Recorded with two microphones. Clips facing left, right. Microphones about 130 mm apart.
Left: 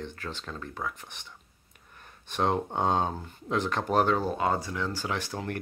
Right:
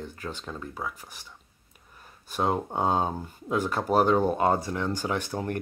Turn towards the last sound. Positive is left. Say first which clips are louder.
# right 3 dB
turn(degrees=-20)  # may be behind; listen again after turning